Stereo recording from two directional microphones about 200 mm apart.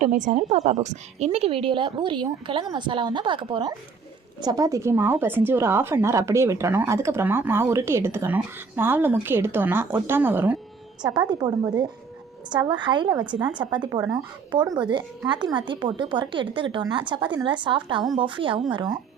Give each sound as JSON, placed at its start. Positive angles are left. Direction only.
{"t": 0.0, "sound": "a woman's voice", "side_deg": -35}
{"t": 11.3, "sound": "a woman's voice", "side_deg": -20}